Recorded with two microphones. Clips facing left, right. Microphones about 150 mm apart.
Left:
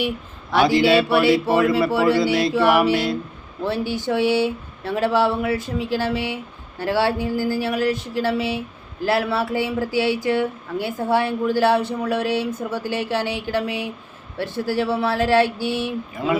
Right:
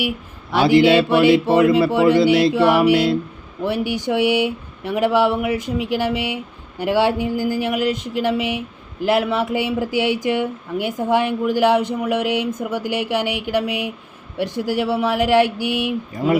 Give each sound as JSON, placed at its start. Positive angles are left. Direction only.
{"t": 0.6, "sound": "a sound", "side_deg": -25}
{"t": 3.6, "sound": "speech", "side_deg": -15}
{"t": 16.1, "sound": "speech", "side_deg": -40}